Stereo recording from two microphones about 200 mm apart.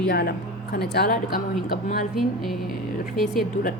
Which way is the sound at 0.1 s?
50° left (ahead or behind).